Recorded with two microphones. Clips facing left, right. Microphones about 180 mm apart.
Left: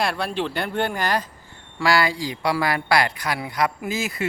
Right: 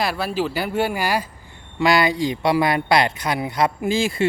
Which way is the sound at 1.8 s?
20° right (ahead or behind).